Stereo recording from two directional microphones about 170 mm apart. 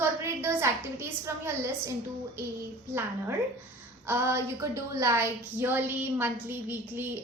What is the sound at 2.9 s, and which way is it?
A woman's voice, 15° right (ahead or behind).